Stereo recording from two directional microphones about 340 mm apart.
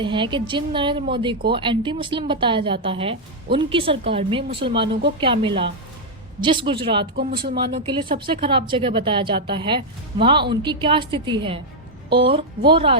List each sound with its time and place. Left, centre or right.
0.0 s speech: centre
7.2 s speech: right
7.6 s speech: centre